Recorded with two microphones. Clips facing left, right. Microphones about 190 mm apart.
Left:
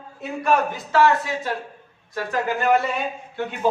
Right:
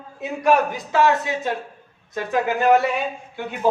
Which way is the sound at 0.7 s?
20° right (ahead or behind).